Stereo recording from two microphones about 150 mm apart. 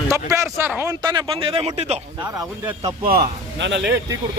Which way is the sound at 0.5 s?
15° right (ahead or behind).